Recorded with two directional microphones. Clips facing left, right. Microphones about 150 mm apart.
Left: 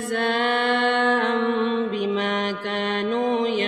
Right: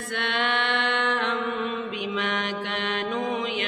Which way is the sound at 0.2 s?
40° left (ahead or behind).